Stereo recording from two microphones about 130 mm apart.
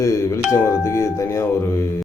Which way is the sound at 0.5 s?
20° left (ahead or behind).